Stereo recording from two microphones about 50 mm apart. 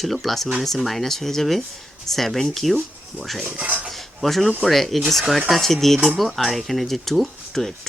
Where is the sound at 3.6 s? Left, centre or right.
Right.